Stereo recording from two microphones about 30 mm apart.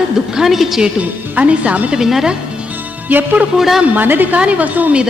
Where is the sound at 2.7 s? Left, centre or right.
Right.